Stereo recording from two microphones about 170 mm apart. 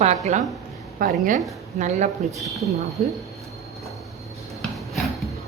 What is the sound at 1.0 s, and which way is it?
A woman's voice, 55° right (ahead or behind).